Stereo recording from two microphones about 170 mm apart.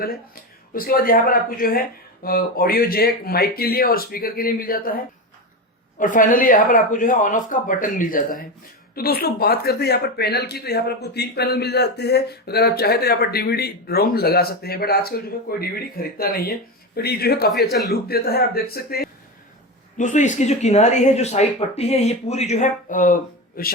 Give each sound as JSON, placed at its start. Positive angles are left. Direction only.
{"t": 0.0, "sound": "speech", "side_deg": 60}
{"t": 20.0, "sound": "speech", "side_deg": 45}